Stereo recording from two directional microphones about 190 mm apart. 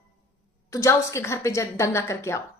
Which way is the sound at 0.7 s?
15° left (ahead or behind).